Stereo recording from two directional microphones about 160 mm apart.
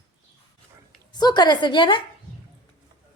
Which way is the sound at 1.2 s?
25° left (ahead or behind).